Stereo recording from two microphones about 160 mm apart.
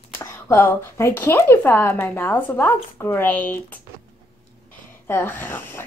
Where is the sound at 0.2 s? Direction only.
15° left (ahead or behind).